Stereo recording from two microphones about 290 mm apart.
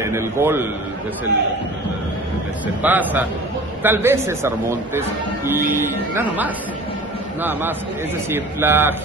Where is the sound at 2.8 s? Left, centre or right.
Centre.